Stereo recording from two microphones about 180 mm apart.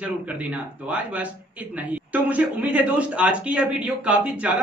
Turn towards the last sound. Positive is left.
turn(degrees=-5)  # may be behind; listen again after turning